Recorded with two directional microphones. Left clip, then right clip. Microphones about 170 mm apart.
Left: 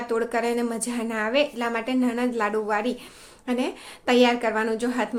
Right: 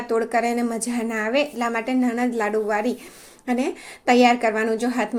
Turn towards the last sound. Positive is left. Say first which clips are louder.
# right 2 dB
turn(degrees=-20)  # may be behind; listen again after turning